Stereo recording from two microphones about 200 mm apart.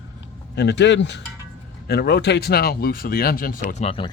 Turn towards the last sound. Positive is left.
turn(degrees=25)  # may be behind; listen again after turning